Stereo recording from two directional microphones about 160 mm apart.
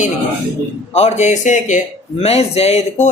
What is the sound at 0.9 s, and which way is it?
Speech, 45° left (ahead or behind).